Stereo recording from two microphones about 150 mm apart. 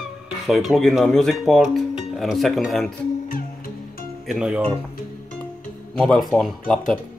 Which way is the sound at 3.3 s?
75° left (ahead or behind).